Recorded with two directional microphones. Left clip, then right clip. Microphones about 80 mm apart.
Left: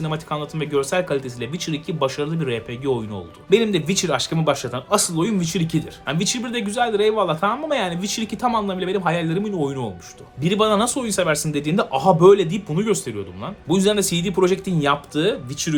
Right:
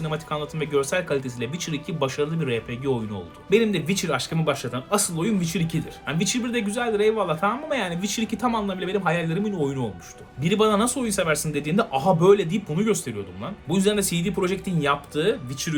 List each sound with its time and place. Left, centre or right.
0.0 s speech: left